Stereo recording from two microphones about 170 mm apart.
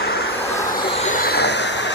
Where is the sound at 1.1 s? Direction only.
65° left (ahead or behind); by 1.9 s 90° left.